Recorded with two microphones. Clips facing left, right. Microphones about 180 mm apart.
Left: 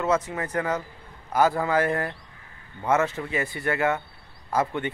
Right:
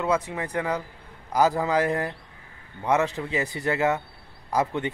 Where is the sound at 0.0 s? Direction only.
15° right (ahead or behind).